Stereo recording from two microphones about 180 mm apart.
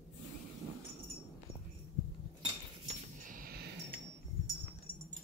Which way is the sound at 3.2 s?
50° right (ahead or behind).